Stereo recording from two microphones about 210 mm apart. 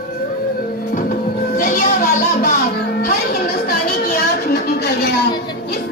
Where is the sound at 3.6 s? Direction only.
45° left (ahead or behind).